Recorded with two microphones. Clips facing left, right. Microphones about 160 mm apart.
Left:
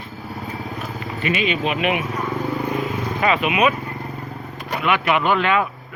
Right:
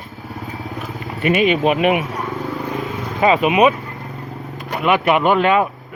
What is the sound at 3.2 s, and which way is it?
Speech, 30° right (ahead or behind).